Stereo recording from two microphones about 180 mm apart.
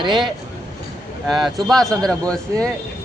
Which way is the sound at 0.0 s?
25° right (ahead or behind).